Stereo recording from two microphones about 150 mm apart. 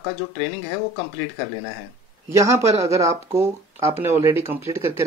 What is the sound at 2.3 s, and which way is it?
Speech, 20° right (ahead or behind).